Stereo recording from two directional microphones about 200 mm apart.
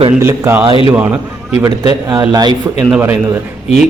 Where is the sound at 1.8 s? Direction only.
20° right (ahead or behind).